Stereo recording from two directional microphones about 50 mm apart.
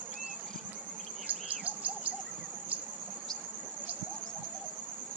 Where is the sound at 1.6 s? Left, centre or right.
Right.